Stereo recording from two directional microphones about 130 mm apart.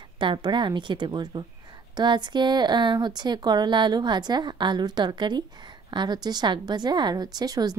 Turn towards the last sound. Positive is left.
turn(degrees=-30)  # may be behind; listen again after turning